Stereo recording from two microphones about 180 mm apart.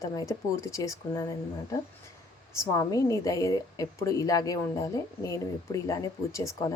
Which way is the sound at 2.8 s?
20° left (ahead or behind).